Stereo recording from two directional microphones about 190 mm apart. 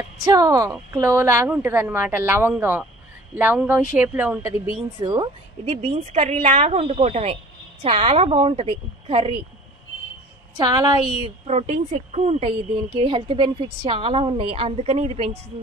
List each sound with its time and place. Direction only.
0.2 s a woman's voice: 20° right (ahead or behind)
5.0 s speech: 25° right (ahead or behind)
10.6 s a woman's voice: 20° right (ahead or behind)
11.4 s speech: 35° right (ahead or behind)